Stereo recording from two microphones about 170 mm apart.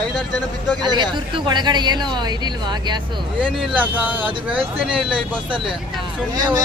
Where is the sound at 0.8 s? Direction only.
25° right (ahead or behind).